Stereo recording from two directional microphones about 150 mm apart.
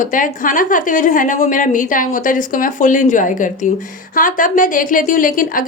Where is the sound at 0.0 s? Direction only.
60° left (ahead or behind).